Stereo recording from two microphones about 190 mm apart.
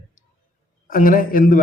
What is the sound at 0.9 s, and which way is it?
Speech, 45° left (ahead or behind).